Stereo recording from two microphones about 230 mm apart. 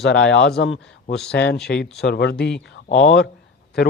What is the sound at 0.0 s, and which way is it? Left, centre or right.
Speech, left.